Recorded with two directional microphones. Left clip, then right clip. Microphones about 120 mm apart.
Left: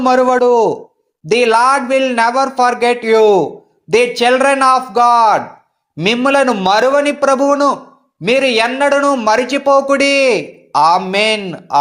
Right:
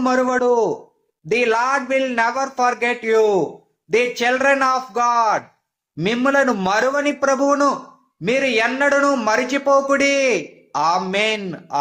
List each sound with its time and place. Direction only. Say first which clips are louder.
0.0 s speech: left 7 dB; 25° left (ahead or behind)